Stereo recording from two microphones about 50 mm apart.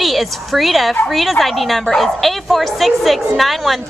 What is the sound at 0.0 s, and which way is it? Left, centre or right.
A woman's voice, centre.